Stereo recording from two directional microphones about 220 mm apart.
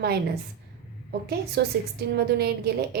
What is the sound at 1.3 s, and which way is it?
A woman's voice, 45° right (ahead or behind).